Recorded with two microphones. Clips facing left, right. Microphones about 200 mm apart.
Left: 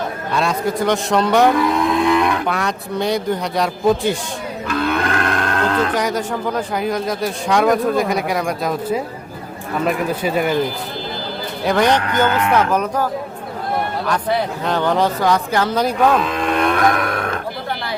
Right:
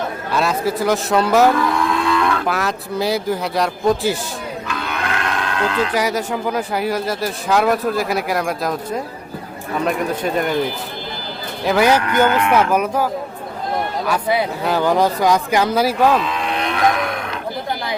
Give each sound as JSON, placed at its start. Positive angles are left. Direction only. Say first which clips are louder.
{"t": 0.3, "sound": "speech", "louder": "even", "side_deg": -5}
{"t": 1.5, "sound": "livestock", "louder": "left 2 dB", "side_deg": 20}
{"t": 2.5, "sound": "speech", "louder": "even", "side_deg": 0}
{"t": 4.7, "sound": "livestock", "louder": "left 7 dB", "side_deg": 55}
{"t": 5.9, "sound": "speech", "louder": "even", "side_deg": -10}
{"t": 11.6, "sound": "speech", "louder": "right 1 dB", "side_deg": -5}
{"t": 14.1, "sound": "speech", "louder": "right 1 dB", "side_deg": -10}
{"t": 16.2, "sound": "livestock", "louder": "left 4 dB", "side_deg": 50}